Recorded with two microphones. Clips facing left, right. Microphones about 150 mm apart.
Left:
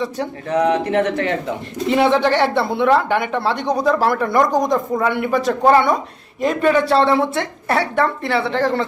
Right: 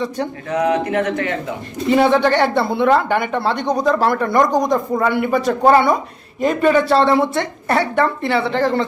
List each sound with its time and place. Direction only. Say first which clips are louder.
0.9 s speech: left 1 dB; 30° left (ahead or behind)
1.9 s speech: right 2 dB; centre (ahead or behind)